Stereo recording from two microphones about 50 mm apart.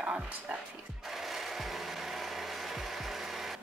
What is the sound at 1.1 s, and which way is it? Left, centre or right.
Music, centre.